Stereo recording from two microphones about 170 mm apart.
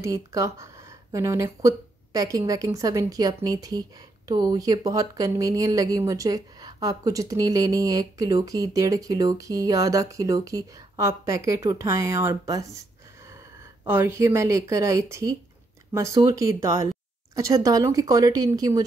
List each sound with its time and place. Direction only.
0.0 s speech: 20° right (ahead or behind)
13.8 s a woman's voice: 15° right (ahead or behind)